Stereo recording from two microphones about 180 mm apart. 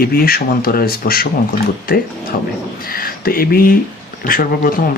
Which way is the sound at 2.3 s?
60° left (ahead or behind).